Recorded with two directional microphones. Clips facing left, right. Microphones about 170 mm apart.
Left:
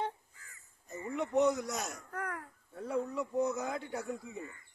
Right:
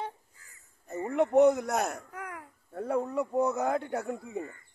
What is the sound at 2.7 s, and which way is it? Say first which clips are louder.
A man's voice: right 5 dB; 55° right (ahead or behind).